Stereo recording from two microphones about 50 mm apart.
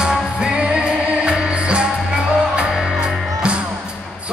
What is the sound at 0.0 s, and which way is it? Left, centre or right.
Music, centre.